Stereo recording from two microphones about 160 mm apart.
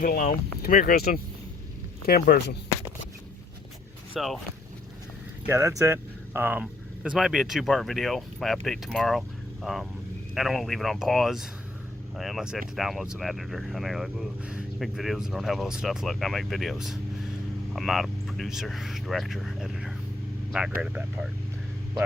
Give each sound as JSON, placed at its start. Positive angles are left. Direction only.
{"t": 0.0, "sound": "speech", "side_deg": 55}
{"t": 4.1, "sound": "speech", "side_deg": 0}
{"t": 5.5, "sound": "speech", "side_deg": -20}